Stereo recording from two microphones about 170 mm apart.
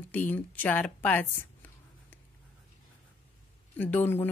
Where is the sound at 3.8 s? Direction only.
10° left (ahead or behind).